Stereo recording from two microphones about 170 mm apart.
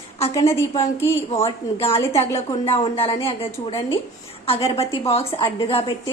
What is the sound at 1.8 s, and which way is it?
A woman's voice, 35° left (ahead or behind).